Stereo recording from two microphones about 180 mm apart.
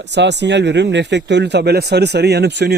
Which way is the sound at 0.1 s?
75° right (ahead or behind).